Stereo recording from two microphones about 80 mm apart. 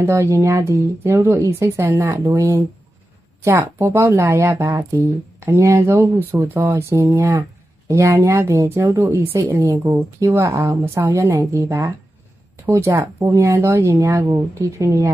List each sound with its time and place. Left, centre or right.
0.0 s speech: right
6.8 s speech: right